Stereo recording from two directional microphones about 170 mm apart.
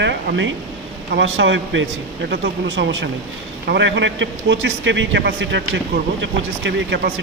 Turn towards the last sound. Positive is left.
turn(degrees=-90)